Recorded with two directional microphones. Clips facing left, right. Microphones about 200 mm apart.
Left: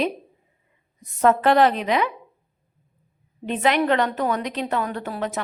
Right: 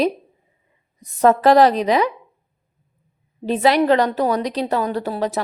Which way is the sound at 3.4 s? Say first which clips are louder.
Right 5 dB; 35° right (ahead or behind).